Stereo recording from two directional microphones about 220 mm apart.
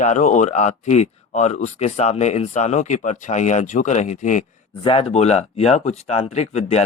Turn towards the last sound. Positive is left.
turn(degrees=30)  # may be behind; listen again after turning